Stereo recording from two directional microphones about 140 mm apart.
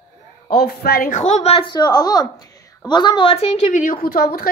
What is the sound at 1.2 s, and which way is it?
A woman's voice, 50° left (ahead or behind).